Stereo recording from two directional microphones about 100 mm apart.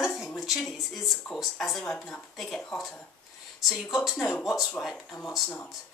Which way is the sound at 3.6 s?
Centre (ahead or behind).